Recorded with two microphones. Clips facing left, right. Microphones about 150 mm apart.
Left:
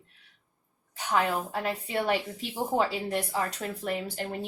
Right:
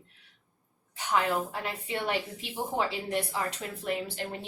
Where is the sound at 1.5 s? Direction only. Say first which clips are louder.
Left 3 dB; 40° left (ahead or behind).